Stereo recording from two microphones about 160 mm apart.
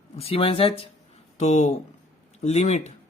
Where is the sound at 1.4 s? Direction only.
45° left (ahead or behind).